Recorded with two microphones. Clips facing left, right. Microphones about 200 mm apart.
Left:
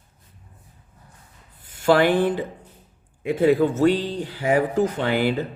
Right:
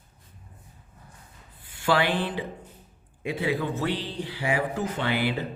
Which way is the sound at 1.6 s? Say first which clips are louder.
Left 7 dB; 45° left (ahead or behind).